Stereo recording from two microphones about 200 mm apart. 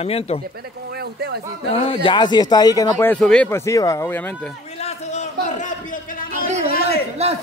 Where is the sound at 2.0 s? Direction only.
20° left (ahead or behind); by 3.4 s 5° left (ahead or behind).